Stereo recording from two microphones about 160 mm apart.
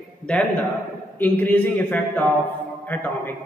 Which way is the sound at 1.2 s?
10° left (ahead or behind).